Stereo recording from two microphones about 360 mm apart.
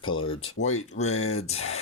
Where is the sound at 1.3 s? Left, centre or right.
Centre.